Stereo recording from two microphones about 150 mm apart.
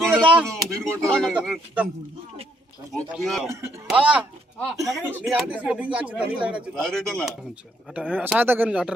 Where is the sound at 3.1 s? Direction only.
Centre (ahead or behind).